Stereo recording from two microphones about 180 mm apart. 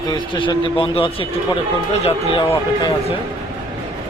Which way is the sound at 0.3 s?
25° left (ahead or behind).